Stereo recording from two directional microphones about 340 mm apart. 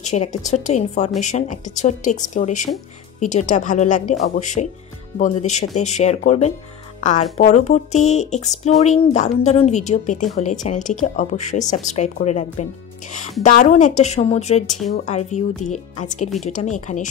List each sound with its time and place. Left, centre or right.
0.0 s speech: left